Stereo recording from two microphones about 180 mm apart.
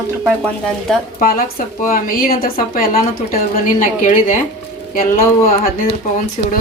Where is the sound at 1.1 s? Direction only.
55° left (ahead or behind).